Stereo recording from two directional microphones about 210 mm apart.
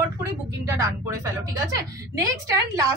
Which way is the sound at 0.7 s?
15° right (ahead or behind).